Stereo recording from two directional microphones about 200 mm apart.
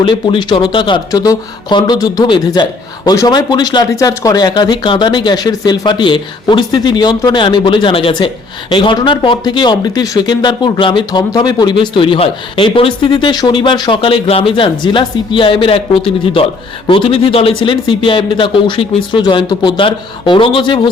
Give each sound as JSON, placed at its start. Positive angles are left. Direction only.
{"t": 0.0, "sound": "speech", "side_deg": 25}